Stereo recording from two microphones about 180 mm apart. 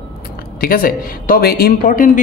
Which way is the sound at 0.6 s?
55° left (ahead or behind).